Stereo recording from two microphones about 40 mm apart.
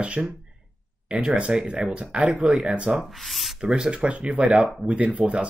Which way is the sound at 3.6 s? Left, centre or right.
Right.